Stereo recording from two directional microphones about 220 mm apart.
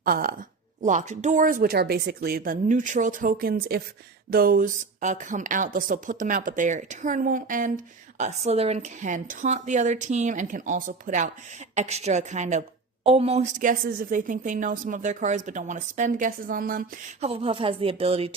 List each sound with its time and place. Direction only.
0.0 s a woman's voice: 40° right (ahead or behind)
17.2 s speech: 25° right (ahead or behind)